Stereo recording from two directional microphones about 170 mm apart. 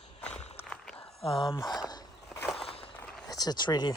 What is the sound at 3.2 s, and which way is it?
Speech, 20° left (ahead or behind).